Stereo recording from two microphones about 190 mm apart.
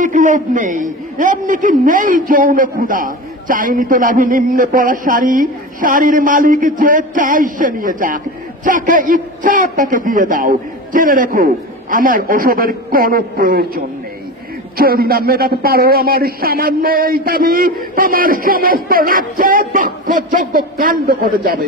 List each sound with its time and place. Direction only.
0.0 s a man's voice: 40° right (ahead or behind)